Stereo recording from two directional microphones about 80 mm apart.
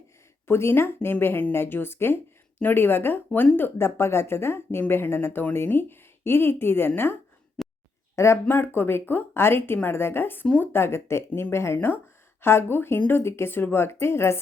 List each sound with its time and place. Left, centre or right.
0.4 s speech: left
10.4 s speech: centre
10.7 s speech: left